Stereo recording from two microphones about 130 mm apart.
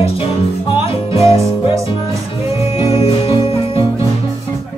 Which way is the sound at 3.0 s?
45° left (ahead or behind).